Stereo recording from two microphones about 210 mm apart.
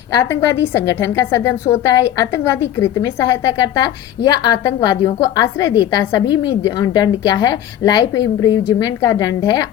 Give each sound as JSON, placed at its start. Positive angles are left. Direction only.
{"t": 0.1, "sound": "a woman's voice", "side_deg": 15}